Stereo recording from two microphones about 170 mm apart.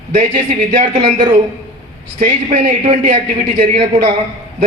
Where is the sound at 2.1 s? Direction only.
45° right (ahead or behind).